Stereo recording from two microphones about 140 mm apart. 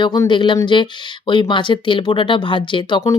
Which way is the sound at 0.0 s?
30° left (ahead or behind).